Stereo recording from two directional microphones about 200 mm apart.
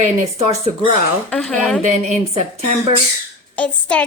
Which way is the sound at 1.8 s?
35° right (ahead or behind).